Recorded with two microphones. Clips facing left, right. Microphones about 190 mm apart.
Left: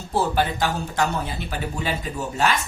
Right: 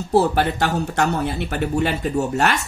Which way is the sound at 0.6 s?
70° right (ahead or behind).